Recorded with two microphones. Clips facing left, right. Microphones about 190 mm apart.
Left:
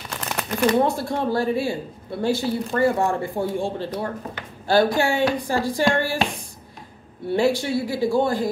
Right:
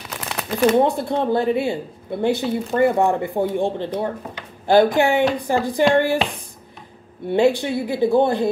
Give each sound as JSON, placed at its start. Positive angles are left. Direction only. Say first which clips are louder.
{"t": 0.1, "sound": "crumpling", "louder": "right 1 dB", "side_deg": 0}
{"t": 0.7, "sound": "speech", "louder": "right 3 dB", "side_deg": -20}
{"t": 7.2, "sound": "speech", "louder": "right 3 dB", "side_deg": -20}